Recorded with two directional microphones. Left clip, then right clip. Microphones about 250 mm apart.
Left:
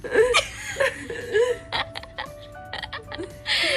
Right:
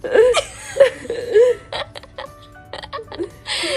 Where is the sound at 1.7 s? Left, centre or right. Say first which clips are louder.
Right 1 dB; centre.